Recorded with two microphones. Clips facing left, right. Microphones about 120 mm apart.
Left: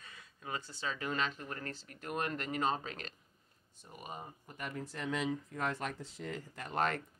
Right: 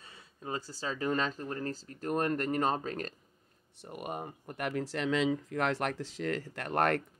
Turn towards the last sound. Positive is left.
turn(degrees=-60)  # may be behind; listen again after turning